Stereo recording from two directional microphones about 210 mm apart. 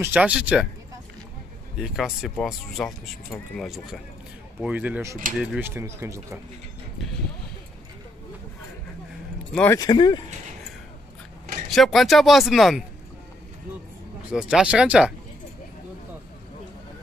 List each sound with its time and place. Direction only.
0.0 s speech: 5° right (ahead or behind)
1.8 s speech: centre (ahead or behind)
9.5 s speech: 10° left (ahead or behind)
11.7 s speech: centre (ahead or behind)
14.3 s speech: 5° right (ahead or behind)